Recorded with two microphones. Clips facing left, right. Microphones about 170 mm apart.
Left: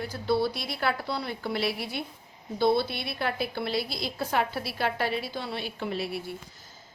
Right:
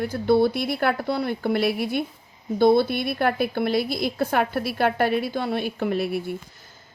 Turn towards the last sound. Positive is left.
turn(degrees=-50)  # may be behind; listen again after turning